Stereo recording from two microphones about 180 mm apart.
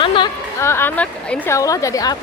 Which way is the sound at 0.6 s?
15° left (ahead or behind).